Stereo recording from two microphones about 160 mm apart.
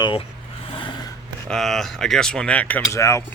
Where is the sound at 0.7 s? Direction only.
30° left (ahead or behind).